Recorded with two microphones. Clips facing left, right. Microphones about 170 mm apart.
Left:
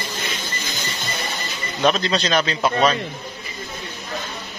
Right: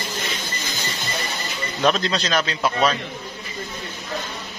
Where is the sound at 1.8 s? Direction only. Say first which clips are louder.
Left 1 dB; centre (ahead or behind).